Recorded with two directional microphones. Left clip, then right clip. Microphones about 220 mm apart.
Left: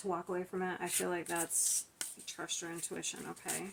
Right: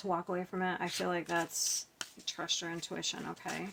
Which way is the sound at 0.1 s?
45° right (ahead or behind).